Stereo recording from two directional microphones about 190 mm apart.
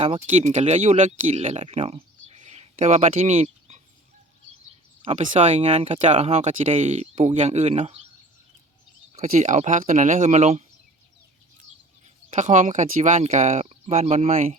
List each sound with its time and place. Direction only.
0.0 s speech: 35° right (ahead or behind)
5.0 s speech: 35° right (ahead or behind)
9.1 s speech: 40° right (ahead or behind)
12.0 s speech: 40° right (ahead or behind)